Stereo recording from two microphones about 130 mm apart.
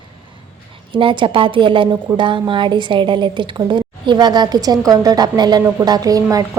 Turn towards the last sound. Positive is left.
turn(degrees=-25)  # may be behind; listen again after turning